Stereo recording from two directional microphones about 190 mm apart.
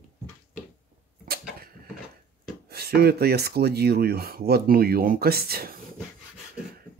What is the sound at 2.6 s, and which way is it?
Speech, 55° right (ahead or behind).